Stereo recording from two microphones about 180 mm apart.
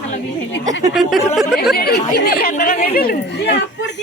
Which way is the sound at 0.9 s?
Centre (ahead or behind).